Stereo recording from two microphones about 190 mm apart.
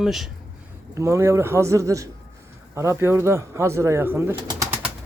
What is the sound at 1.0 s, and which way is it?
Speech, 15° right (ahead or behind).